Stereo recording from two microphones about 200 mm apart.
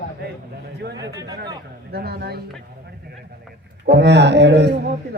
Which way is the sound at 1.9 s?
50° right (ahead or behind).